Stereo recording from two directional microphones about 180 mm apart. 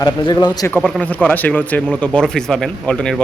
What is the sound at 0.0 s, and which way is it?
Speech, 20° left (ahead or behind).